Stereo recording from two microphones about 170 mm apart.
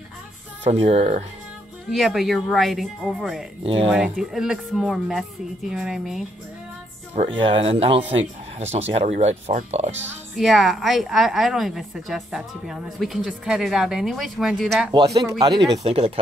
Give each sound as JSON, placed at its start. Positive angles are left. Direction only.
{"t": 0.7, "sound": "speech", "side_deg": -35}
{"t": 1.9, "sound": "a woman's voice", "side_deg": 0}
{"t": 3.6, "sound": "speech", "side_deg": -35}
{"t": 3.9, "sound": "a woman's voice", "side_deg": -5}
{"t": 7.2, "sound": "speech", "side_deg": -30}
{"t": 10.3, "sound": "a woman's voice", "side_deg": 0}
{"t": 14.9, "sound": "speech", "side_deg": -25}
{"t": 15.8, "sound": "speech", "side_deg": -35}